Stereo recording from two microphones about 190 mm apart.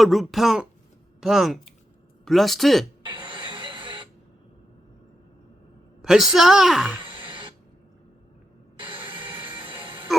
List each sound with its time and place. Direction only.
0.0 s a woman's voice: centre (ahead or behind)
3.0 s music: 25° right (ahead or behind)
6.0 s a woman's voice: centre (ahead or behind)
7.0 s a sound: 25° right (ahead or behind)
8.8 s music: 25° right (ahead or behind)